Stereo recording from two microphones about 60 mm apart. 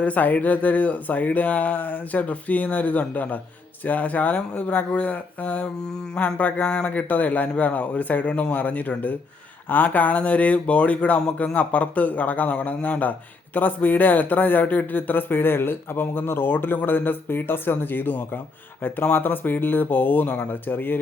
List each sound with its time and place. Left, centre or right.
0.0 s speech: left